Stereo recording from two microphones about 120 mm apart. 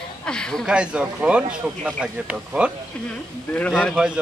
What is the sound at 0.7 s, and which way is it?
Speech, 10° right (ahead or behind).